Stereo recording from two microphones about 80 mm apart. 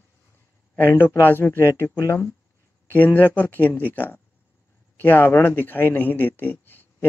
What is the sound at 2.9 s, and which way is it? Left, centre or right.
Speech, left.